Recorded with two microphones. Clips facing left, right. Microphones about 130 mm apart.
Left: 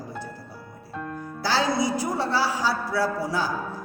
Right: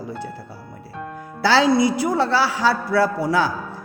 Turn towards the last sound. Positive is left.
turn(degrees=-70)  # may be behind; listen again after turning